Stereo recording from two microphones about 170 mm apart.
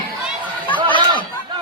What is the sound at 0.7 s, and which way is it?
Chatter, 30° right (ahead or behind).